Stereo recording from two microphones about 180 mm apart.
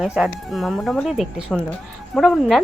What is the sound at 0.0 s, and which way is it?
Speech, 5° right (ahead or behind).